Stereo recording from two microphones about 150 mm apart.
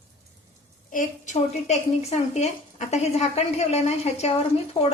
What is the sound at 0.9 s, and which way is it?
A woman's voice, 60° left (ahead or behind).